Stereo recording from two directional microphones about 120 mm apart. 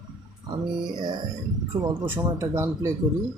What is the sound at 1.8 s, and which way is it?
Speech, 20° right (ahead or behind).